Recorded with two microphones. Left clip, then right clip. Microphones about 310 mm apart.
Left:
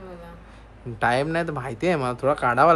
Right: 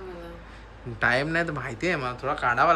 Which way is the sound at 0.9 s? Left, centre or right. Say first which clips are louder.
Left 1 dB; centre.